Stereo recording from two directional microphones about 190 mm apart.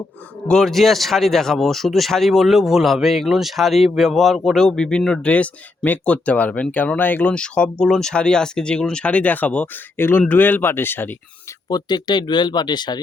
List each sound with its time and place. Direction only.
0.4 s speech: 5° left (ahead or behind)
11.7 s speech: 20° left (ahead or behind)